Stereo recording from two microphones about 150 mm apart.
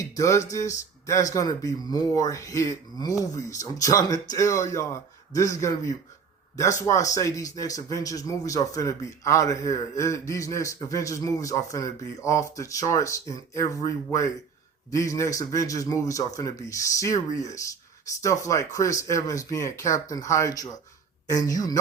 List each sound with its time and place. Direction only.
0.2 s speech: 20° left (ahead or behind)